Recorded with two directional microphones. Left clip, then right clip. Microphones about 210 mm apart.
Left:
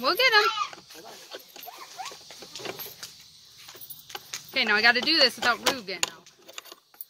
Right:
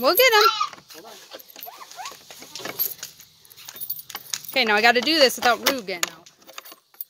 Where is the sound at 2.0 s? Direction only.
55° right (ahead or behind).